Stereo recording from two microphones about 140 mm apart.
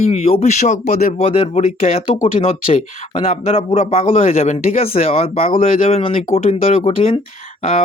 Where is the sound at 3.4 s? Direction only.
45° left (ahead or behind).